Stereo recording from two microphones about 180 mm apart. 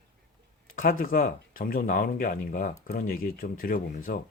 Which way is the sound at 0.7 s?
50° left (ahead or behind).